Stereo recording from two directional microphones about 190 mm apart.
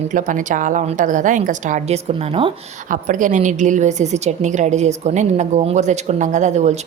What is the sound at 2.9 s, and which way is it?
Speech, 40° right (ahead or behind).